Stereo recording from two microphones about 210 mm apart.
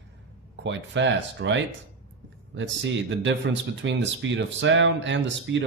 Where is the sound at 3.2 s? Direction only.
60° right (ahead or behind).